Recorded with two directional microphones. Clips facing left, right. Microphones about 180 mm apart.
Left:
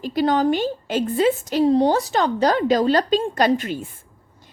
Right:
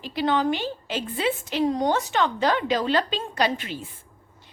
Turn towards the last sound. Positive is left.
turn(degrees=50)  # may be behind; listen again after turning